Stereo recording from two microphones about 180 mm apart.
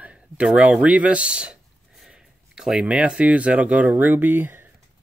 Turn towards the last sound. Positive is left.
turn(degrees=-10)  # may be behind; listen again after turning